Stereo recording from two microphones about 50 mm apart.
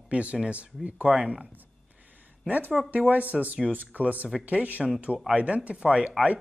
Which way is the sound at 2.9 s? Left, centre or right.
Right.